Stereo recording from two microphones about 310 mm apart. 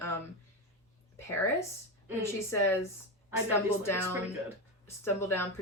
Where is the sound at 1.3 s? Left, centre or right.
Centre.